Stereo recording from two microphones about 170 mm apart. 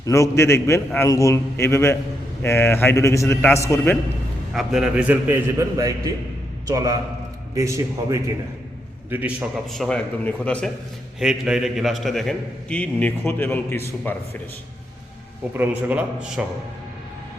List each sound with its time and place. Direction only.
0.0 s a man's voice: 15° left (ahead or behind)
4.5 s a man's voice: 5° right (ahead or behind)
9.7 s a man's voice: 5° left (ahead or behind)
11.2 s a man's voice: 5° right (ahead or behind); by 14.2 s 10° left (ahead or behind)
15.5 s a man's voice: 10° right (ahead or behind)